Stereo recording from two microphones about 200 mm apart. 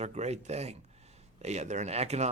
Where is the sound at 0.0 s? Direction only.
35° right (ahead or behind).